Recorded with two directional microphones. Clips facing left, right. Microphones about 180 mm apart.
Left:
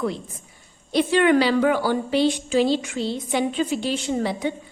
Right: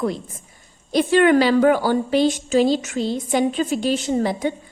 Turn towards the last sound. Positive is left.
turn(degrees=-45)  # may be behind; listen again after turning